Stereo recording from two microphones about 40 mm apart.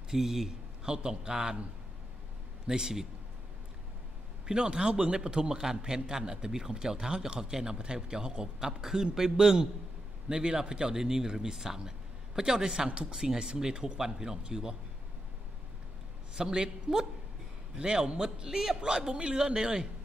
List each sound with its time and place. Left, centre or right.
0.1 s speech: centre
2.6 s a man's voice: centre
4.5 s a man's voice: right
16.3 s a man's voice: centre